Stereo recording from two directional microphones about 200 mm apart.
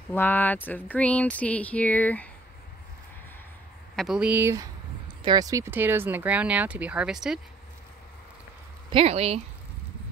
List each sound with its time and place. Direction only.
0.1 s speech: 10° left (ahead or behind)
3.9 s speech: centre (ahead or behind)
8.9 s speech: 30° right (ahead or behind)